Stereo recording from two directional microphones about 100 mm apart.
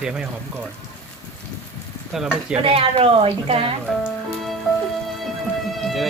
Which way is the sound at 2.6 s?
75° right (ahead or behind).